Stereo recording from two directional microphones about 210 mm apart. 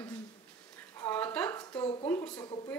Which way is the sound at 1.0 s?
10° left (ahead or behind).